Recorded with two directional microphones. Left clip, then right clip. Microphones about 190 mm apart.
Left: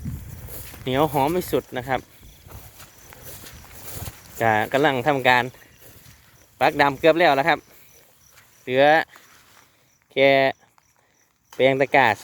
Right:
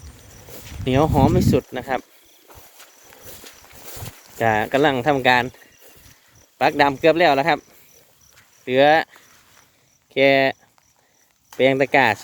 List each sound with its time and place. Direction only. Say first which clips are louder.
0.9 s speech: right 3 dB; 10° right (ahead or behind)
2.6 s a sound: right 1 dB; 60° left (ahead or behind)
4.4 s speech: right 1 dB; 10° right (ahead or behind)
6.6 s speech: right 1 dB; 10° right (ahead or behind)
8.6 s speech: right 2 dB; 10° right (ahead or behind)
10.2 s speech: right 1 dB; 5° right (ahead or behind)